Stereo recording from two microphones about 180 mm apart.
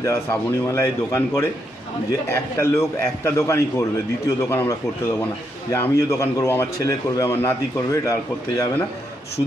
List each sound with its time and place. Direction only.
0.0 s a man's voice: 15° left (ahead or behind)
2.6 s a man's voice: 15° left (ahead or behind)